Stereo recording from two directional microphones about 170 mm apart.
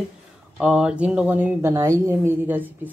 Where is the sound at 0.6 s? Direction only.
5° right (ahead or behind).